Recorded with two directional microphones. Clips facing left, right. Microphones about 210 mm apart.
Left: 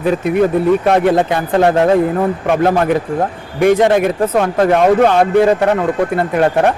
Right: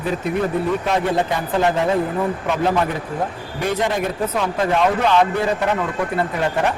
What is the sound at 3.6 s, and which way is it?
Speech, 75° left (ahead or behind).